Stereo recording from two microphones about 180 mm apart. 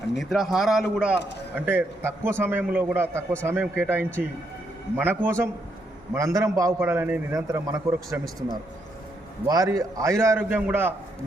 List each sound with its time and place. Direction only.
0.2 s a man's voice: centre (ahead or behind)
8.2 s speech: centre (ahead or behind)
9.5 s a man's voice: 20° right (ahead or behind)